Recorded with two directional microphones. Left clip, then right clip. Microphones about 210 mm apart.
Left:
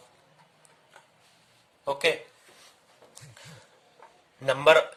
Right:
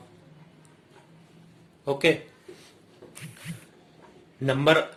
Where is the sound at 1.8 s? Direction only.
30° left (ahead or behind).